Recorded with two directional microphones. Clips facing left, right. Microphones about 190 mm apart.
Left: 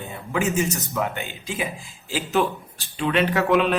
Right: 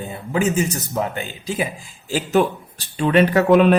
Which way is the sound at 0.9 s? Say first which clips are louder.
Right 3 dB; 35° right (ahead or behind).